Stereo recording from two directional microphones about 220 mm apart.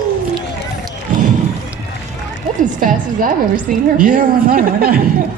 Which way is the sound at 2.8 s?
40° right (ahead or behind).